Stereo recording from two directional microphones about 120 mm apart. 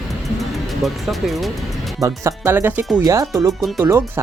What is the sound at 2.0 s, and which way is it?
Speech, 25° right (ahead or behind).